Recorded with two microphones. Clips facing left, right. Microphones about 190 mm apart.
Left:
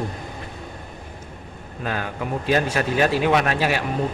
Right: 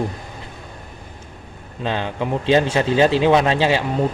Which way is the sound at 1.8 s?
25° right (ahead or behind).